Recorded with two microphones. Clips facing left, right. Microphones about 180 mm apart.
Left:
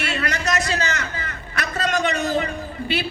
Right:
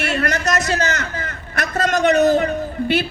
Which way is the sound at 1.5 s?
45° right (ahead or behind).